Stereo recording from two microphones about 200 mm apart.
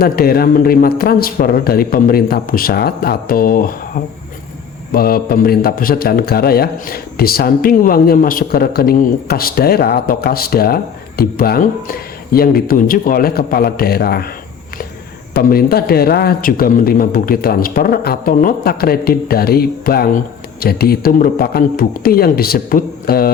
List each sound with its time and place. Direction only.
0.0 s speech: 50° left (ahead or behind)
4.9 s speech: 50° left (ahead or behind)
15.3 s speech: 50° left (ahead or behind)